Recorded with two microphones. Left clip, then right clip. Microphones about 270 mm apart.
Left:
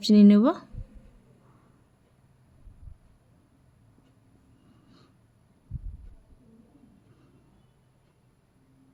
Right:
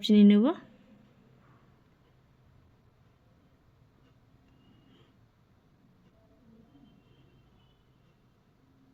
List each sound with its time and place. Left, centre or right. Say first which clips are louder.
0.0 s speech: left 3 dB; centre